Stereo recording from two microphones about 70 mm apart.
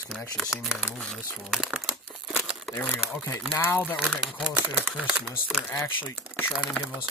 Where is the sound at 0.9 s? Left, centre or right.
Centre.